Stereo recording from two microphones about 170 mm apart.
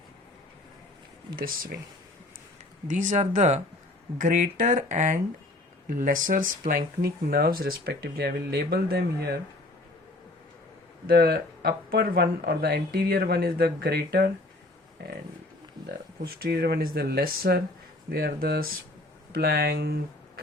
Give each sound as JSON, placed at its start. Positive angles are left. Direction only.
{"t": 2.8, "sound": "speech", "side_deg": -45}
{"t": 11.0, "sound": "speech", "side_deg": -70}